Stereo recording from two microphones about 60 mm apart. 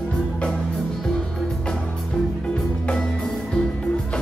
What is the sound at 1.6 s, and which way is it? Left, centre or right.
Music, centre.